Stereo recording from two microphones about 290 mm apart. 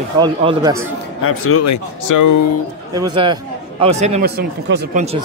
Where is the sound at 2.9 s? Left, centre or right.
Centre; by 5.0 s right.